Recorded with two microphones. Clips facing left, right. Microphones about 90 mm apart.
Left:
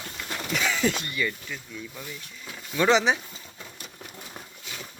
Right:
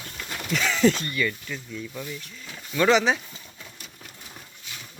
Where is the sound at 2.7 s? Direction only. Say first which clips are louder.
Right 1 dB; 20° left (ahead or behind).